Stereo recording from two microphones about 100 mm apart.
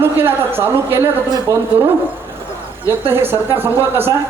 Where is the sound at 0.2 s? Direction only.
20° right (ahead or behind).